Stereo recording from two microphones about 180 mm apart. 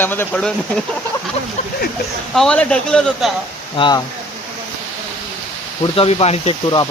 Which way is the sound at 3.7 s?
25° left (ahead or behind).